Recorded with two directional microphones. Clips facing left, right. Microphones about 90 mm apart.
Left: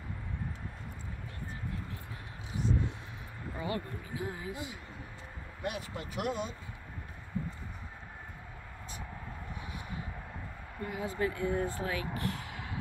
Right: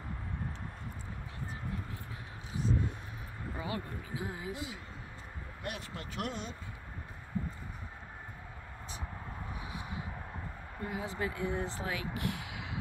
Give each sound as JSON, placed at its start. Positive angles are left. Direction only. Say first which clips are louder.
{"t": 3.5, "sound": "speech", "louder": "left 3 dB", "side_deg": -15}
{"t": 5.6, "sound": "speech", "louder": "left 4 dB", "side_deg": 5}
{"t": 9.6, "sound": "a sound", "louder": "right 1 dB", "side_deg": -20}
{"t": 10.9, "sound": "speech", "louder": "left 3 dB", "side_deg": -20}